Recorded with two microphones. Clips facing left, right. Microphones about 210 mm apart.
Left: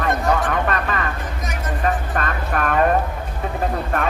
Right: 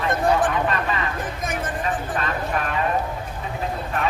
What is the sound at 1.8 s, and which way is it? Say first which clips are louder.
Vehicle: left 7 dB; 55° left (ahead or behind).